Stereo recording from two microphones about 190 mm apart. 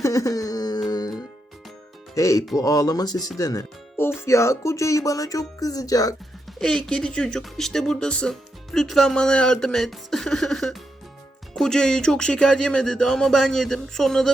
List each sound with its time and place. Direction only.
0.0 s wail: 15° left (ahead or behind)
2.1 s speech: 15° left (ahead or behind)
6.6 s speech: 5° left (ahead or behind)